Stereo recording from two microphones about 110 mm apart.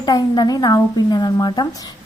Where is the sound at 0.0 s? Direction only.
35° left (ahead or behind).